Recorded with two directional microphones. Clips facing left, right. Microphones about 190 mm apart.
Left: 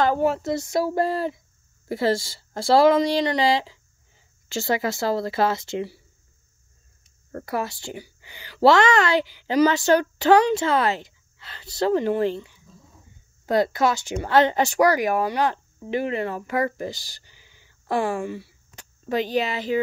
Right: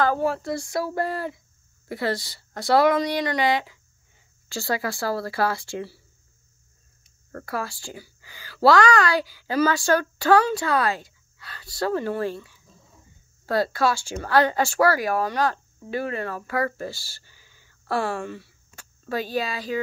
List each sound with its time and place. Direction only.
0.0 s a woman's voice: 20° left (ahead or behind)
7.3 s a woman's voice: 20° left (ahead or behind)